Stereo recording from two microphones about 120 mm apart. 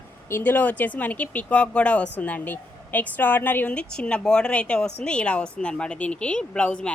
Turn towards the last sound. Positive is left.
turn(degrees=10)  # may be behind; listen again after turning